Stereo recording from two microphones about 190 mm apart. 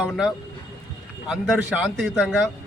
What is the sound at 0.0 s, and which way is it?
A man's voice, centre (ahead or behind).